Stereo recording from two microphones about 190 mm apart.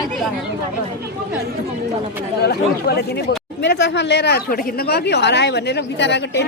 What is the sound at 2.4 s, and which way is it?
Speech, 55° left (ahead or behind).